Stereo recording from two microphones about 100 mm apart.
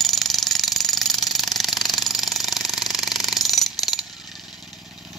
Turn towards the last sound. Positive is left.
turn(degrees=0)  # may be behind; listen again after turning